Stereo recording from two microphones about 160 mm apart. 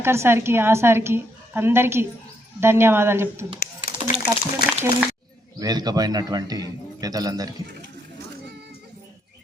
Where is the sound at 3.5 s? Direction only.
65° left (ahead or behind).